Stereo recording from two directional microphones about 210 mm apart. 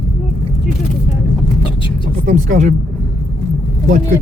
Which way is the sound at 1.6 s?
25° left (ahead or behind).